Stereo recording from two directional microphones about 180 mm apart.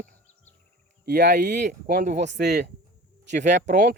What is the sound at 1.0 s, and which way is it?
Speech, 60° right (ahead or behind).